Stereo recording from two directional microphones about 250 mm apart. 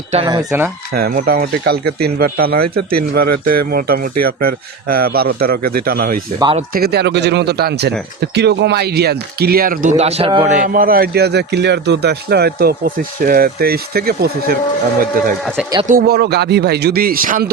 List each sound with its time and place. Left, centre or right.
0.1 s speech: centre
0.9 s speech: right
3.2 s speech: right
3.7 s speech: right
6.4 s speech: right
6.7 s speech: right
10.6 s speech: right
15.9 s speech: right